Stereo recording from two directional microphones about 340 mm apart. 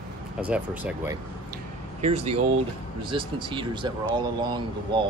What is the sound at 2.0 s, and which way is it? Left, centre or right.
Speech, centre.